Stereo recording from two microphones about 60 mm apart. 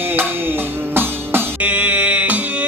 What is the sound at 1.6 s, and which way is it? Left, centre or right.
Music, right.